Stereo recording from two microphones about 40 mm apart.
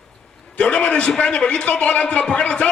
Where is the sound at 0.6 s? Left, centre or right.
Left.